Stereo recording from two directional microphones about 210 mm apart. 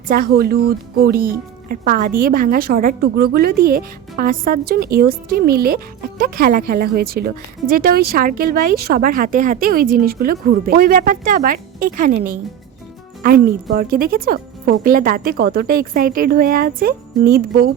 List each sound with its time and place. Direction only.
0.1 s a woman's voice: 45° right (ahead or behind)